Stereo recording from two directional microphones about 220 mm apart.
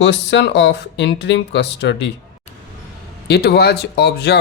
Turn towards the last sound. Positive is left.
turn(degrees=50)  # may be behind; listen again after turning